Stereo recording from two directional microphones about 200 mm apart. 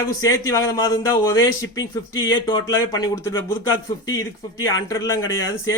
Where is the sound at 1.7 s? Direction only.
80° left.